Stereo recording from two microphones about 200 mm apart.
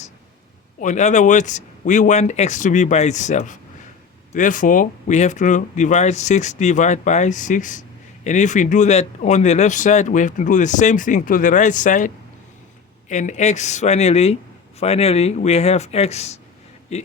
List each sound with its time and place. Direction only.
0.8 s speech: 35° left (ahead or behind)